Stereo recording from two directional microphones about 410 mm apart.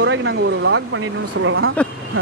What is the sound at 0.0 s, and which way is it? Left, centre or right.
A man's voice, right.